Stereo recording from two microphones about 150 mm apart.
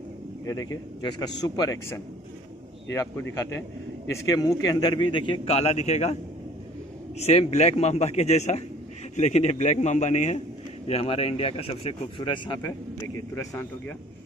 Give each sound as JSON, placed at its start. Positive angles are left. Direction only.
{"t": 1.4, "sound": "a man's voice", "side_deg": 25}
{"t": 7.2, "sound": "a man's voice", "side_deg": 45}
{"t": 10.9, "sound": "speech", "side_deg": 40}
{"t": 13.3, "sound": "a man's voice", "side_deg": 20}